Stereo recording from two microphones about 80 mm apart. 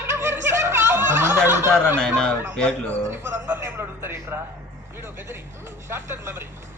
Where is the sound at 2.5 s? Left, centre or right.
Centre.